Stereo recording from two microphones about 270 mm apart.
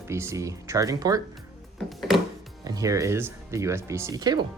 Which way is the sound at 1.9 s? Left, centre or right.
Centre.